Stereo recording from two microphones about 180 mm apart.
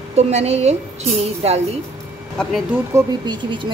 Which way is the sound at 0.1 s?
35° right (ahead or behind).